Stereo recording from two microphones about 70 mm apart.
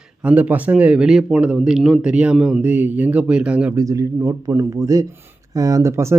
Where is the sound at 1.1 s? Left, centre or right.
Centre.